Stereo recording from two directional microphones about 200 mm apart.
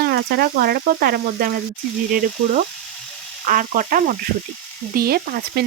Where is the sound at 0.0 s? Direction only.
50° right (ahead or behind).